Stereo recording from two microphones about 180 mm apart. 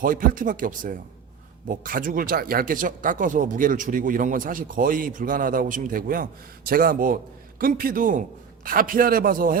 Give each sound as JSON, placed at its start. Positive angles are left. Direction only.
{"t": 0.0, "sound": "speech", "side_deg": -50}